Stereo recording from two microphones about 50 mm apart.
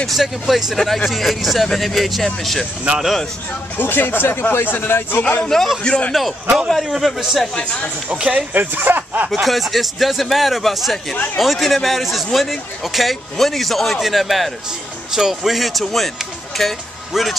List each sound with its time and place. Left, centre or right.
0.1 s a man's voice: centre
0.7 s a man's voice: centre
3.7 s speech: left
5.5 s speech: centre
5.9 s a man's voice: left
6.7 s a man's voice: centre
8.1 s speech: right
8.5 s speech: right
9.3 s a man's voice: centre